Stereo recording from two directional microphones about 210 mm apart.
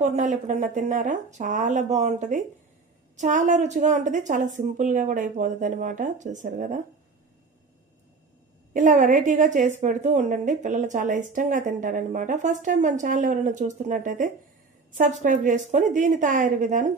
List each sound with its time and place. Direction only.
0.0 s a woman's voice: 35° right (ahead or behind)
8.7 s a woman's voice: 40° right (ahead or behind)